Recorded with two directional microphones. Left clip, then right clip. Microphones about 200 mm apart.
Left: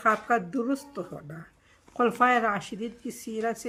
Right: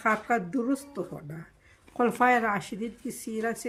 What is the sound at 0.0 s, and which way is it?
Speech, 10° left (ahead or behind).